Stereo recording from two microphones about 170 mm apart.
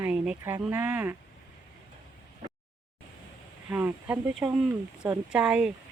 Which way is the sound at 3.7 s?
10° right (ahead or behind).